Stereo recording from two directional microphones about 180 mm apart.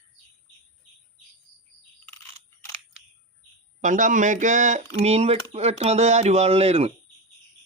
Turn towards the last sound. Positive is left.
turn(degrees=-35)  # may be behind; listen again after turning